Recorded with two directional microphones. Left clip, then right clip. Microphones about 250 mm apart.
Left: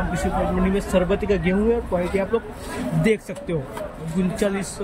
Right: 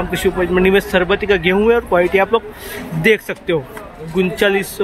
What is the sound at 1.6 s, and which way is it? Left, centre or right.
Speech, right.